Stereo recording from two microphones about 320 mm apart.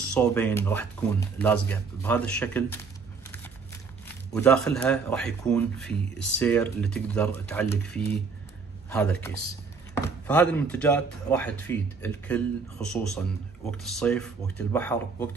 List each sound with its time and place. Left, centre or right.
0.1 s speech: centre
4.3 s speech: centre